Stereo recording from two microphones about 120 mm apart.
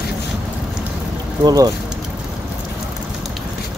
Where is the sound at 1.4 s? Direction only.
35° right (ahead or behind).